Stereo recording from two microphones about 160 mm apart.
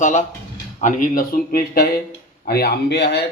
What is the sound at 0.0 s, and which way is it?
Speech, 50° left (ahead or behind).